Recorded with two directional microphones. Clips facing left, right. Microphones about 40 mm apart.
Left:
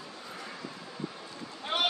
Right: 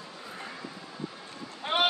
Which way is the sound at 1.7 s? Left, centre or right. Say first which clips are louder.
Right 4 dB; centre.